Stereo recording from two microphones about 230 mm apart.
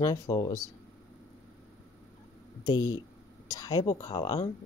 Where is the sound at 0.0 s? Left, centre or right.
Centre.